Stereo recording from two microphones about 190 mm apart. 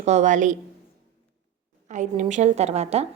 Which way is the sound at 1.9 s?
40° right (ahead or behind).